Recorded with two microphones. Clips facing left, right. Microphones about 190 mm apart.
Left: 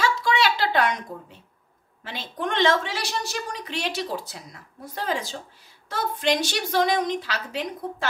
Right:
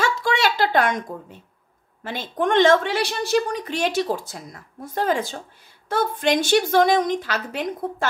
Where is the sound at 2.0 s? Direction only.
50° right (ahead or behind).